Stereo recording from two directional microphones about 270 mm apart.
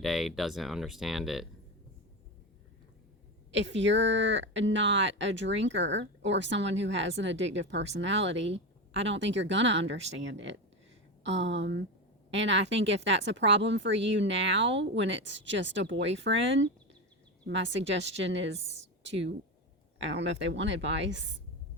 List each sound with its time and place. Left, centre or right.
0.0 s speech: centre
3.5 s a woman's voice: right